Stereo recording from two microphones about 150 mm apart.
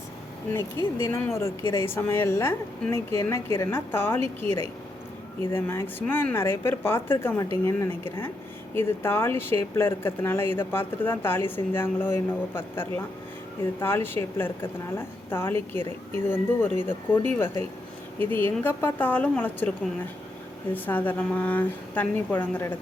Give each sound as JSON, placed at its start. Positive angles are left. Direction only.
{"t": 0.9, "sound": "speech", "side_deg": 15}